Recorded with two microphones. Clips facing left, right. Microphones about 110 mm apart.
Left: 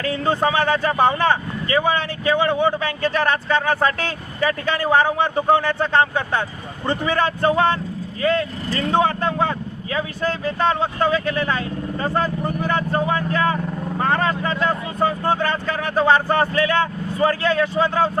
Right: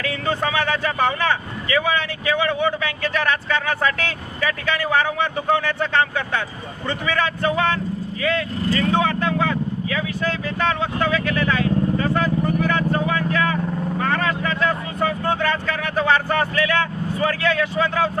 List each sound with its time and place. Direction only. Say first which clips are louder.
0.0 s speech: left 3 dB; 35° left (ahead or behind)